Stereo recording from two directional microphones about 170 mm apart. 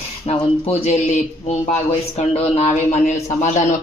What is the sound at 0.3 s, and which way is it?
Speech, 35° left (ahead or behind).